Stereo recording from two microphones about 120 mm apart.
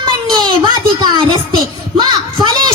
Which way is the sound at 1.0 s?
40° right (ahead or behind).